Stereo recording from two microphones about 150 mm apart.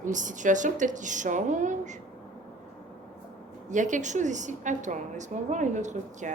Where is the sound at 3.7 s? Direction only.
55° right (ahead or behind).